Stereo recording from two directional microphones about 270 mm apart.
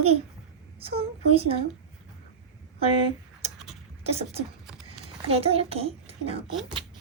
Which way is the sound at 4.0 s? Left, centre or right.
Right.